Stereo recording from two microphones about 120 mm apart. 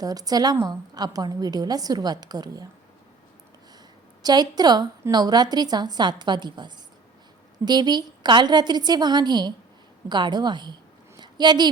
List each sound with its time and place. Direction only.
0.0 s a woman's voice: 30° right (ahead or behind)
4.2 s a woman's voice: 35° right (ahead or behind)
11.2 s a sound: 35° right (ahead or behind)